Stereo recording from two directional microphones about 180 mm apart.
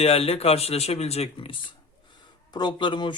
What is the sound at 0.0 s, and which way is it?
Speech, 35° left (ahead or behind).